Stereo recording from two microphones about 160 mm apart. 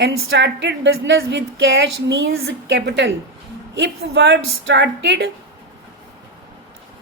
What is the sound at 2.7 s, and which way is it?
Speech, 90° right.